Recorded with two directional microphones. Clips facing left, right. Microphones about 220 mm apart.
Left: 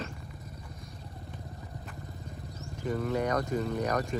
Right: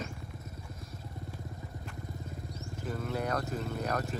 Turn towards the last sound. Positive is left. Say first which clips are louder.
# left 4 dB
turn(degrees=-5)  # may be behind; listen again after turning